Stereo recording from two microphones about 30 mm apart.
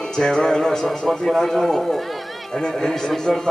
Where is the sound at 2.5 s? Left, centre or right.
Centre.